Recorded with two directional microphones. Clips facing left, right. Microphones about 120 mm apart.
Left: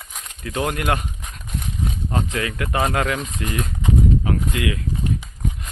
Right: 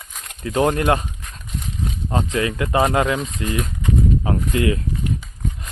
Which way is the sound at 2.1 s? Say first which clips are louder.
Right 5 dB; 25° right (ahead or behind).